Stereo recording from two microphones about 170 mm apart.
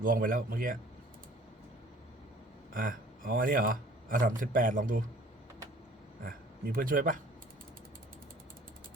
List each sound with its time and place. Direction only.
0.0 s a man's voice: 55° right (ahead or behind)
2.7 s speech: 55° right (ahead or behind)
6.2 s speech: 60° right (ahead or behind)